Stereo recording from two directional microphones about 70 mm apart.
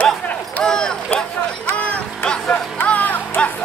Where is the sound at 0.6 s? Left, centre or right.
Centre.